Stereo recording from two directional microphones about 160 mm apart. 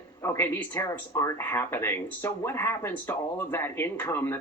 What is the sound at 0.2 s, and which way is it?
A woman's voice, 15° left (ahead or behind).